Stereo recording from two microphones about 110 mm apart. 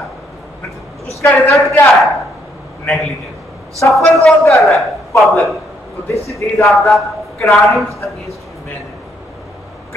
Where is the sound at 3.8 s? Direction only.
20° left (ahead or behind).